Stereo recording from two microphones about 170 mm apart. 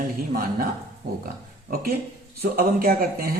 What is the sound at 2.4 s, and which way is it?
Speech, 60° right (ahead or behind).